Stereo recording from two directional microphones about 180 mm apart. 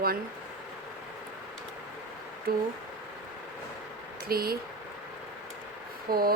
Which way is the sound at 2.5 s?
55° right (ahead or behind).